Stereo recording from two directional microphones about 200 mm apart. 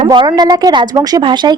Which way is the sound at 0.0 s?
25° right (ahead or behind).